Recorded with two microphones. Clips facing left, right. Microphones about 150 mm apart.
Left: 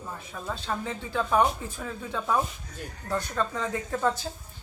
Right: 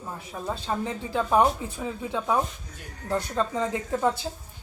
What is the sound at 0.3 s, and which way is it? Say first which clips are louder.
Speech: right 3 dB; 20° right (ahead or behind).